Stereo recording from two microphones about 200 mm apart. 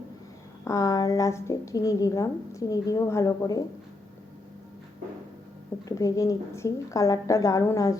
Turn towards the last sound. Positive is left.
turn(degrees=15)  # may be behind; listen again after turning